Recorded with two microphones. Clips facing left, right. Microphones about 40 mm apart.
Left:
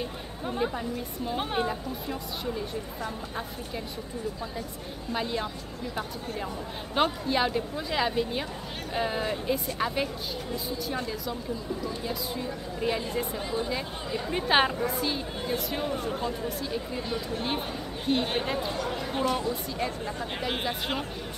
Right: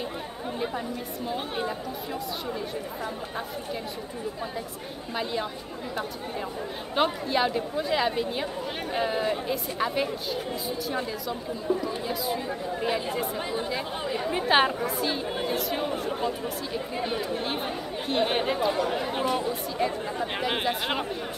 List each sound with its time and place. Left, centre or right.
0.6 s speech: centre
5.1 s speech: centre
7.0 s speech: centre
14.0 s speech: centre
14.3 s speech: centre
16.9 s speech: right
17.6 s speech: centre
18.2 s speech: centre